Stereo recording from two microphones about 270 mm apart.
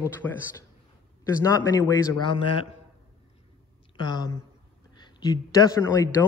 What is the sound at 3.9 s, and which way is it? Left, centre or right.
Speech, centre.